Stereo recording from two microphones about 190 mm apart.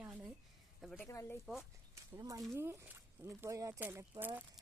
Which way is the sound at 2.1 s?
20° right (ahead or behind).